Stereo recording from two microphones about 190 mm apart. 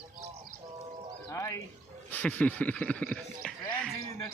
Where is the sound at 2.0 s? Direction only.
5° left (ahead or behind).